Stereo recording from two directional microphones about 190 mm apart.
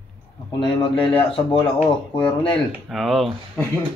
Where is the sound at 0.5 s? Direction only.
25° left (ahead or behind).